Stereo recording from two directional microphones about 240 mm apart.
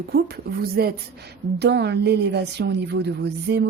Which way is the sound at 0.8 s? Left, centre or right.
Right.